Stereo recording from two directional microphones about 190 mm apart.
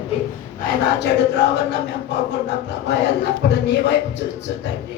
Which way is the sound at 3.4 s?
60° left (ahead or behind).